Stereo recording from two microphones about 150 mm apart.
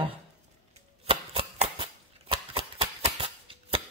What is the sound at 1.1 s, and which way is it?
Shuffling cards, 40° right (ahead or behind).